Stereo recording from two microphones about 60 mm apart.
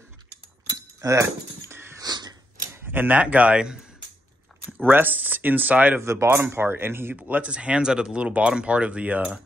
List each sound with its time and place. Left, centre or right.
1.0 s speech: right
1.7 s wheeze: right
2.0 s a sound: right
2.9 s speech: right
4.6 s speech: right
5.9 s speech: right
7.2 s speech: right